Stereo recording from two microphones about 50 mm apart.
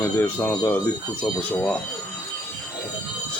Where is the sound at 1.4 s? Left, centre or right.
Left.